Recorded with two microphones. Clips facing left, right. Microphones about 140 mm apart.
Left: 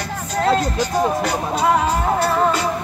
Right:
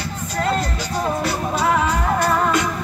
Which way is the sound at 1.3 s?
35° left (ahead or behind).